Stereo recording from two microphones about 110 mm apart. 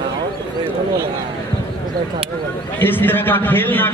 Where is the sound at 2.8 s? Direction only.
20° left (ahead or behind).